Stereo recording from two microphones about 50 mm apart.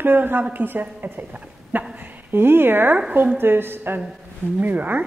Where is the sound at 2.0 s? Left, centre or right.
Right.